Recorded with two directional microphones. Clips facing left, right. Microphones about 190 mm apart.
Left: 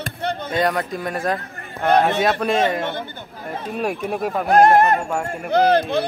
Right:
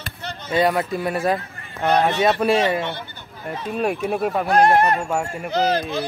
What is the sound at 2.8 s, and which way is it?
Speech, 50° left (ahead or behind).